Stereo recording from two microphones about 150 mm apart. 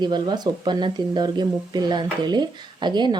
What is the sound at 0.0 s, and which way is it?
A woman's voice, 30° right (ahead or behind).